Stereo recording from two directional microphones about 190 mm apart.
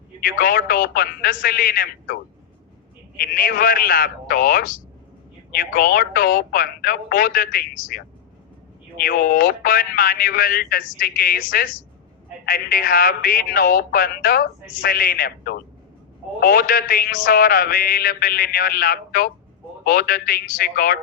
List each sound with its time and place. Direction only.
0.2 s speech: 50° left (ahead or behind)
3.2 s speech: 50° left (ahead or behind)